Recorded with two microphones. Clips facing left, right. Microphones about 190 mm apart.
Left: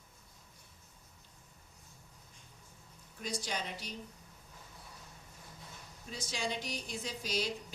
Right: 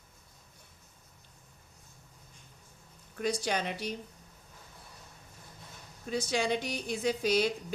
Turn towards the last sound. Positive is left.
turn(degrees=-65)  # may be behind; listen again after turning